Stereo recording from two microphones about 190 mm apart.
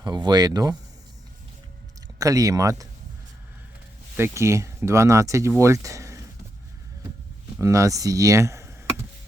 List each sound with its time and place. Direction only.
0.0 s speech: 20° right (ahead or behind)
2.1 s speech: 20° right (ahead or behind)
4.2 s speech: 15° right (ahead or behind)
7.6 s speech: 15° right (ahead or behind)